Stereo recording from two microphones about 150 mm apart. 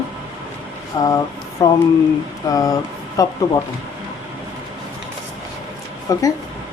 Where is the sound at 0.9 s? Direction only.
30° left (ahead or behind).